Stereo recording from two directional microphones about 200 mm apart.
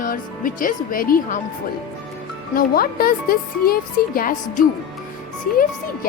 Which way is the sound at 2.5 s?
50° left (ahead or behind).